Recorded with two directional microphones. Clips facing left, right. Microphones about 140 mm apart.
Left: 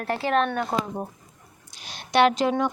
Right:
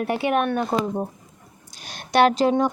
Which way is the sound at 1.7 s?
50° right (ahead or behind).